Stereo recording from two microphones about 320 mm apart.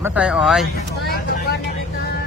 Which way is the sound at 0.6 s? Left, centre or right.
Left.